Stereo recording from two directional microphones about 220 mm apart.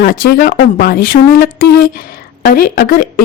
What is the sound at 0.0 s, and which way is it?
A woman's voice, 40° left (ahead or behind).